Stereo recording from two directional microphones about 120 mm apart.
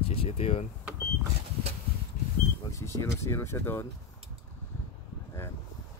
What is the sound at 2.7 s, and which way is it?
Speech, 25° left (ahead or behind).